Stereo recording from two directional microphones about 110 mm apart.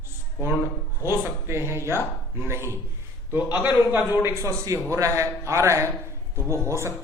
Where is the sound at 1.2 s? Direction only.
25° right (ahead or behind).